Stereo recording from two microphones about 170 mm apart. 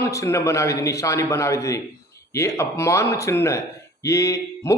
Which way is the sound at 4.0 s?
20° left (ahead or behind).